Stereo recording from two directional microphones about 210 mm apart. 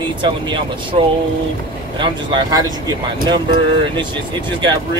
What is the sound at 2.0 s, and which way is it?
Speech, 20° right (ahead or behind).